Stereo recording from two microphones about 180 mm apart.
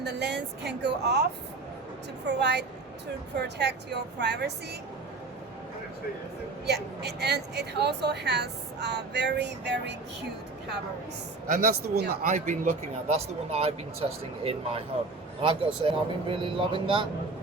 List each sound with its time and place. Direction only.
0.0 s a woman's voice: 70° right (ahead or behind)
2.2 s a woman's voice: 70° right (ahead or behind)
6.7 s a woman's voice: 65° right (ahead or behind)
11.4 s speech: 50° right (ahead or behind)
12.3 s speech: 40° right (ahead or behind)